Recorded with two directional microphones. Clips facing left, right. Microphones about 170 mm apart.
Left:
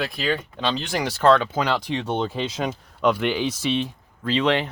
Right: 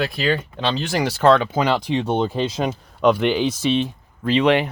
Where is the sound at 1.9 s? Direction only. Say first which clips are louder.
Right 4 dB; 35° right (ahead or behind).